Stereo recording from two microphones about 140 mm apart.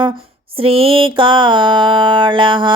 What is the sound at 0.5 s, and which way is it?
Mantra, 40° right (ahead or behind).